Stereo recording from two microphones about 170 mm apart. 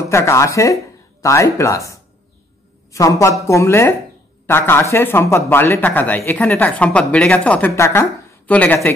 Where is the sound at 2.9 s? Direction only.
20° left (ahead or behind).